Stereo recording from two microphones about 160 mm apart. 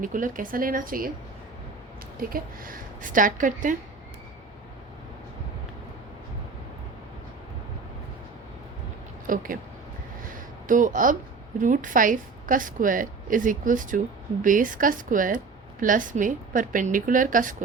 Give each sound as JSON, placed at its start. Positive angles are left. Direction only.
{"t": 0.0, "sound": "a woman's voice", "side_deg": -55}
{"t": 2.1, "sound": "a woman's voice", "side_deg": -60}
{"t": 9.2, "sound": "speech", "side_deg": -60}
{"t": 10.3, "sound": "a sound", "side_deg": -55}
{"t": 11.6, "sound": "a woman's voice", "side_deg": -55}